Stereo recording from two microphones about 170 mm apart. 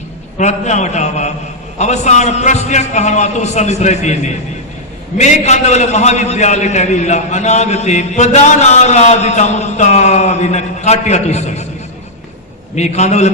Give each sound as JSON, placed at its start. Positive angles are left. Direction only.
{"t": 0.3, "sound": "a man's voice", "side_deg": 45}
{"t": 12.7, "sound": "a man's voice", "side_deg": 45}